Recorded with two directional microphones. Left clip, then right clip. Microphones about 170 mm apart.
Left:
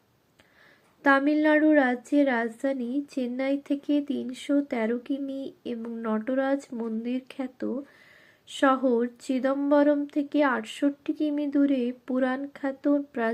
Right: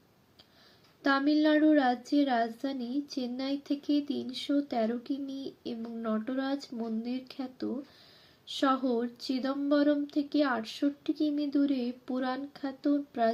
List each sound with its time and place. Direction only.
1.0 s speech: 15° left (ahead or behind)